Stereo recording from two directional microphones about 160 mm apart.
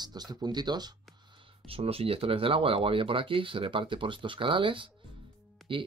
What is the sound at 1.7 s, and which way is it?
Speech, 35° right (ahead or behind).